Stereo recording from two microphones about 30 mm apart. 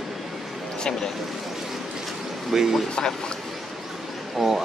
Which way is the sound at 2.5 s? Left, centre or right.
Centre.